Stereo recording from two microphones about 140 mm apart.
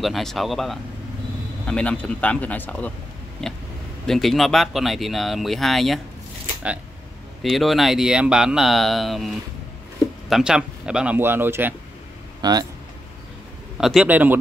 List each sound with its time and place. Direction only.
0.0 s speech: centre (ahead or behind)
7.4 s speech: centre (ahead or behind)
10.3 s speech: 5° right (ahead or behind)
12.4 s speech: 30° right (ahead or behind)
13.7 s a man's voice: centre (ahead or behind)
14.0 s speech: 10° right (ahead or behind)